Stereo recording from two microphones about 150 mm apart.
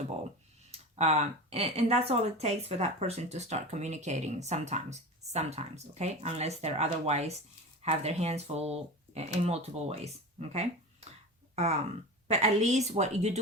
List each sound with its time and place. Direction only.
0.7 s speech: 45° right (ahead or behind)